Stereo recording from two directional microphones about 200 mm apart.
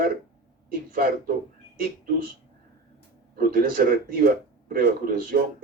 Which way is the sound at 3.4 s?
45° right (ahead or behind).